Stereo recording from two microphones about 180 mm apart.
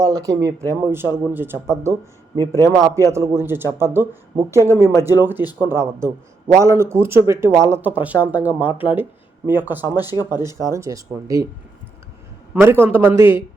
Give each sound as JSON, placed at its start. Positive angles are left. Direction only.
{"t": 0.0, "sound": "a man's voice", "side_deg": -20}
{"t": 12.5, "sound": "a man's voice", "side_deg": -10}